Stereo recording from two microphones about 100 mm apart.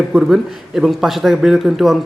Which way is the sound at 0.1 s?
10° right (ahead or behind).